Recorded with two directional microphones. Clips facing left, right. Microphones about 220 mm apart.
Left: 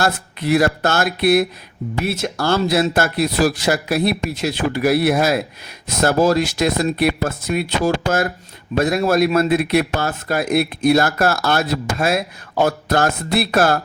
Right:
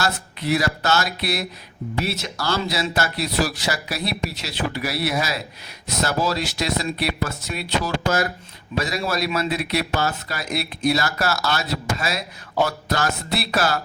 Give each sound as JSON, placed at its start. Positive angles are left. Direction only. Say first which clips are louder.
{"t": 0.0, "sound": "speech", "louder": "left 5 dB", "side_deg": 55}